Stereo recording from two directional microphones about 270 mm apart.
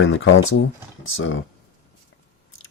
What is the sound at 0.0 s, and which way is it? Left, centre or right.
Speech, left.